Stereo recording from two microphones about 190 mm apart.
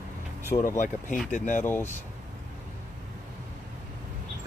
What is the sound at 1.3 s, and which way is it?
Speech, 40° left (ahead or behind).